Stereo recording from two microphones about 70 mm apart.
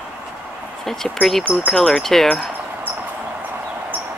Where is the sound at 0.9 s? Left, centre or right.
Centre.